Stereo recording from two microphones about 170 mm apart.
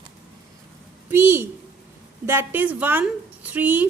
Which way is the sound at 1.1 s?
15° right (ahead or behind).